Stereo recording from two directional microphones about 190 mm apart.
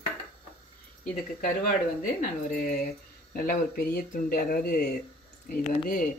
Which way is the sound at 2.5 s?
45° left (ahead or behind).